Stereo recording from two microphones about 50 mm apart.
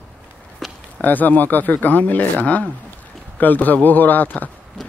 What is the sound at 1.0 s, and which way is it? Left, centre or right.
Speech, left.